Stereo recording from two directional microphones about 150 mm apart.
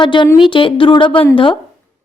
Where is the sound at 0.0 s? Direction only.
30° left (ahead or behind).